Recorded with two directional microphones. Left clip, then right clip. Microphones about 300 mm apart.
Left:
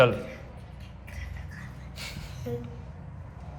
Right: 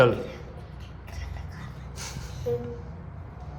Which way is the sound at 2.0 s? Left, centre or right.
Centre.